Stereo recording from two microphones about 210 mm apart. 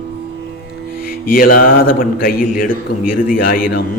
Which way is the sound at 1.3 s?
45° left (ahead or behind).